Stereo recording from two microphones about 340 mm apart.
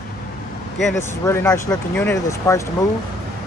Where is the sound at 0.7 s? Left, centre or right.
Centre.